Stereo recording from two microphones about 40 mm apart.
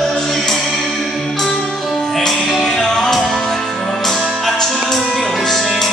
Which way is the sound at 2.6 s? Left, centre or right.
Centre.